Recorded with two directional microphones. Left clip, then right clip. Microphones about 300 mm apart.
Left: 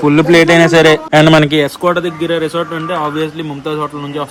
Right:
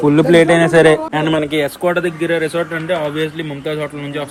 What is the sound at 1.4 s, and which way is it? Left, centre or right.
Speech, left.